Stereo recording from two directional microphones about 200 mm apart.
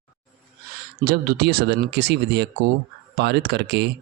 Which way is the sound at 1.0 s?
50° right (ahead or behind).